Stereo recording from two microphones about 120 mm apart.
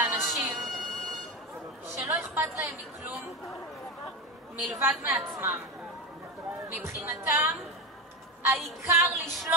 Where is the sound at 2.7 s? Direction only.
15° right (ahead or behind).